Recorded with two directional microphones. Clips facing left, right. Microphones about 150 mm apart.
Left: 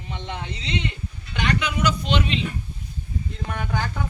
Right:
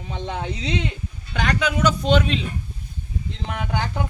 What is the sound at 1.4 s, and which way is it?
Speech, 40° right (ahead or behind).